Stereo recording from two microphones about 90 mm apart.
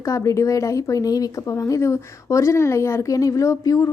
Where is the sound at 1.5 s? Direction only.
30° left (ahead or behind).